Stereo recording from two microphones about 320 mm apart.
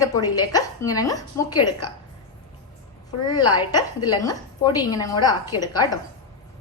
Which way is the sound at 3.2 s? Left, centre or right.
Centre.